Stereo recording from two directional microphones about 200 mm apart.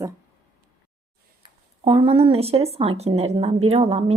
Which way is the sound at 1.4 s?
25° right (ahead or behind).